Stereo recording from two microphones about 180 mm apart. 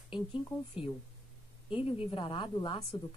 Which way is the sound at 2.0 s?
25° left (ahead or behind).